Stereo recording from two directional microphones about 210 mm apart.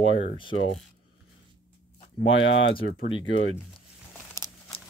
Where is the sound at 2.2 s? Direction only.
65° left (ahead or behind).